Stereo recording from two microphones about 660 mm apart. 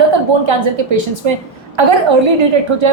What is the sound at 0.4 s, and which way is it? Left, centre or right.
A woman's voice, right.